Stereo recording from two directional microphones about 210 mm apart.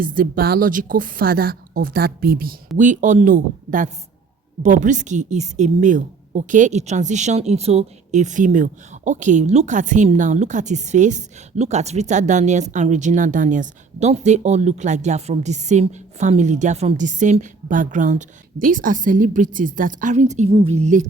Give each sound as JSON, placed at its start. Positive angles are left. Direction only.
{"t": 0.0, "sound": "a woman's voice", "side_deg": -40}